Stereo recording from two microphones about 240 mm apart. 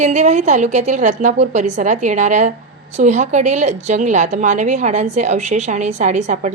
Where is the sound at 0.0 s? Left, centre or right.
Right.